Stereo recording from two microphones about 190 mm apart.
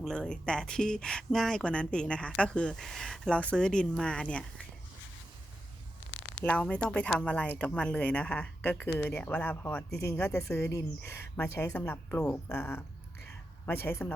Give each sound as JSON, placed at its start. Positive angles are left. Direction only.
{"t": 0.0, "sound": "speech", "side_deg": 5}
{"t": 6.4, "sound": "speech", "side_deg": 5}